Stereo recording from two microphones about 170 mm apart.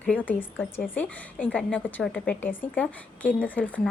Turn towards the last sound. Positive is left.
turn(degrees=10)  # may be behind; listen again after turning